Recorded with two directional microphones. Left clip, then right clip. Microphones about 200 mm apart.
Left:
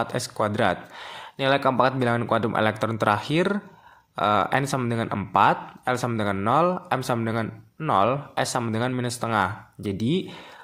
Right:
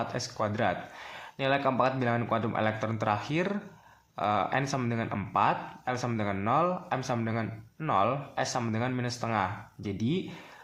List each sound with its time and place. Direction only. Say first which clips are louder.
0.0 s speech: left 6 dB; 25° left (ahead or behind)